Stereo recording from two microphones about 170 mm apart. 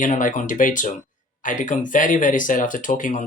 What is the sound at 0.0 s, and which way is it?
Speech, 50° left (ahead or behind).